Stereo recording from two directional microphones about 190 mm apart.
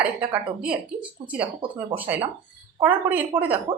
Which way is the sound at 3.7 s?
25° right (ahead or behind).